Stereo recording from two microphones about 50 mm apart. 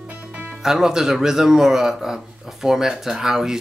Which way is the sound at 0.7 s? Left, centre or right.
Centre.